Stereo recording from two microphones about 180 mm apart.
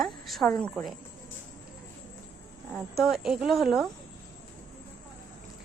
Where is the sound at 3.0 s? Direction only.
Centre (ahead or behind).